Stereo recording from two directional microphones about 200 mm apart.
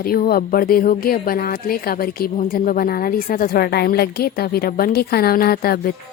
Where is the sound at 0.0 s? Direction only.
45° left (ahead or behind).